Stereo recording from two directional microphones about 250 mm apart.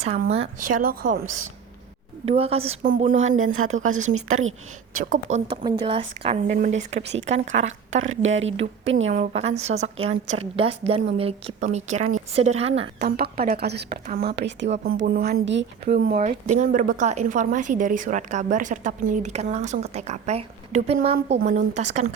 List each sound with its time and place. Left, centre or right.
0.0 s speech: right
2.3 s speech: right
3.2 s speech: right
3.8 s speech: right
4.1 s a woman's voice: right
5.0 s a woman's voice: right
5.5 s speech: right
8.0 s speech: right
8.4 s speech: right
8.9 s speech: right
9.1 s speech: right
13.0 s a woman's voice: right